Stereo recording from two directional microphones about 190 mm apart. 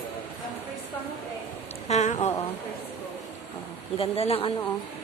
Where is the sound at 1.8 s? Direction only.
35° left (ahead or behind).